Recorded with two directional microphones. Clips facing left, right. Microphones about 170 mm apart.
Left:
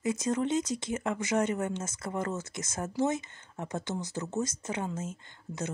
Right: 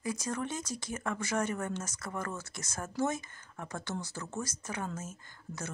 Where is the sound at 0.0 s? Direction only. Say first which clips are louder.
Left 6 dB; 25° left (ahead or behind).